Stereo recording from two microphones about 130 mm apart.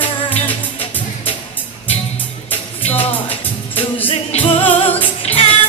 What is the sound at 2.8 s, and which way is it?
Music, 50° left (ahead or behind).